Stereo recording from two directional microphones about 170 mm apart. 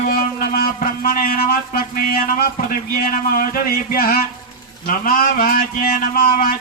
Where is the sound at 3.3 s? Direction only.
55° left (ahead or behind).